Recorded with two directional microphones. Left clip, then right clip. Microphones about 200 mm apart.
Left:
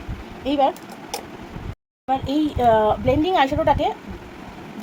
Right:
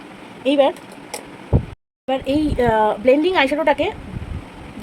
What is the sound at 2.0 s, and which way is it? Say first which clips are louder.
Speech: right 2 dB; 45° right (ahead or behind).